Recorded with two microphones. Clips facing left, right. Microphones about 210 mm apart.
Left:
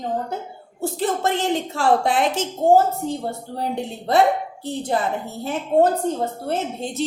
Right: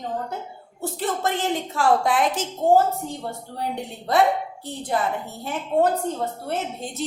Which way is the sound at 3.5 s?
30° left (ahead or behind).